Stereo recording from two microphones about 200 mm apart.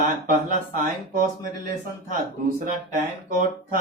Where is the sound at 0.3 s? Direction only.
45° right (ahead or behind).